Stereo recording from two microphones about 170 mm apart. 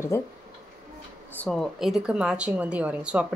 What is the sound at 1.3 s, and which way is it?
A woman's voice, 5° left (ahead or behind).